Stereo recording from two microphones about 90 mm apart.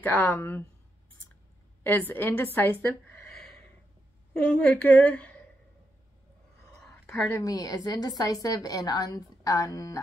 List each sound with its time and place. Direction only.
0.0 s a woman's voice: 20° left (ahead or behind)
1.8 s a woman's voice: 25° left (ahead or behind)
4.3 s a woman's voice: 10° left (ahead or behind)
7.3 s a woman's voice: 40° left (ahead or behind)